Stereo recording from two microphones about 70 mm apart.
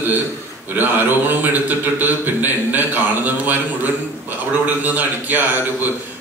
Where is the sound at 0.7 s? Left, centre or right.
Right.